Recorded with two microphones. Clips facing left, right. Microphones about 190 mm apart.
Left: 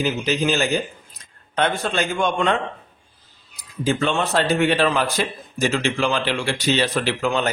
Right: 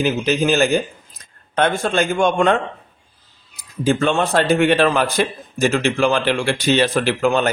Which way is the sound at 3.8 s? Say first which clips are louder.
Right 4 dB; 50° right (ahead or behind).